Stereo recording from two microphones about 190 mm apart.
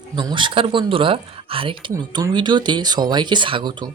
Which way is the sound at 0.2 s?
25° right (ahead or behind).